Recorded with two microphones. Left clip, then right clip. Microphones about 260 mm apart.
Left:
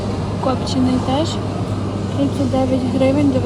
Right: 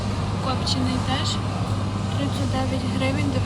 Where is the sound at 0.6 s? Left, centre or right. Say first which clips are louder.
Left 6 dB; centre.